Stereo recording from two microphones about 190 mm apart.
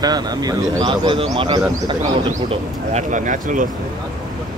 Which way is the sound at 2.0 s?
40° right (ahead or behind).